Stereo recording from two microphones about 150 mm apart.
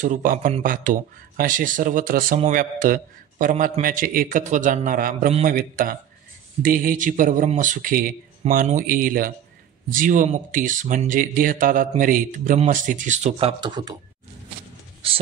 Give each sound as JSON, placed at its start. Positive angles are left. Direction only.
{"t": 0.0, "sound": "a man's voice", "side_deg": -60}